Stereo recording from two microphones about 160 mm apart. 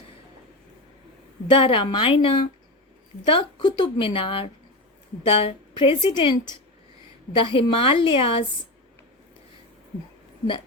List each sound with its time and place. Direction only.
1.5 s a woman's voice: 30° left (ahead or behind)
7.3 s a woman's voice: 35° left (ahead or behind)